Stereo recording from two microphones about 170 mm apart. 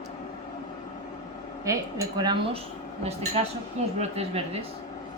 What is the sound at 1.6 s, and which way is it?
Speech, 20° right (ahead or behind).